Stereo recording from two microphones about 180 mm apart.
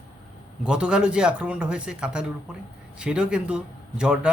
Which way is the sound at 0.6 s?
5° right (ahead or behind).